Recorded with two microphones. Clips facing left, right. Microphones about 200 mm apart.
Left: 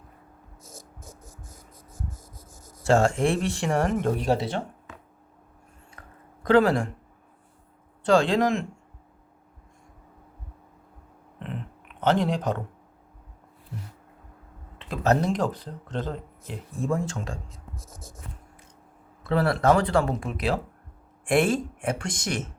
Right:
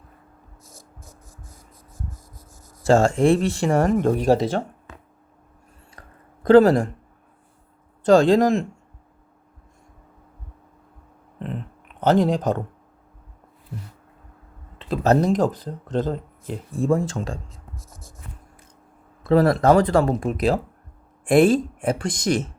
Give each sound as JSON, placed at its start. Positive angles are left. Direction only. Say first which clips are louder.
{"t": 2.8, "sound": "speech", "louder": "right 5 dB", "side_deg": -35}
{"t": 6.0, "sound": "a sound", "louder": "right 5 dB", "side_deg": -35}
{"t": 8.0, "sound": "speech", "louder": "right 6 dB", "side_deg": -40}
{"t": 11.9, "sound": "speech", "louder": "right 5 dB", "side_deg": -40}
{"t": 14.8, "sound": "speech", "louder": "right 5 dB", "side_deg": -35}
{"t": 19.2, "sound": "speech", "louder": "right 6 dB", "side_deg": -40}